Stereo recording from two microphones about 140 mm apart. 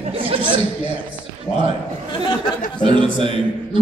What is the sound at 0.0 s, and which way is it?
Chatter, 40° right (ahead or behind).